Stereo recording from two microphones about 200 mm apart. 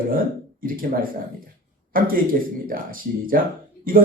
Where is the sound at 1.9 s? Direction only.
45° right (ahead or behind).